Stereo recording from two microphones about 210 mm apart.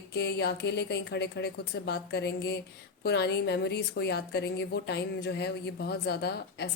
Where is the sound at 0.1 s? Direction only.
55° left (ahead or behind).